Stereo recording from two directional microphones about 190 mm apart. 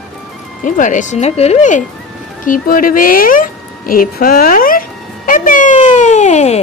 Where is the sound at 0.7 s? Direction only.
40° left (ahead or behind).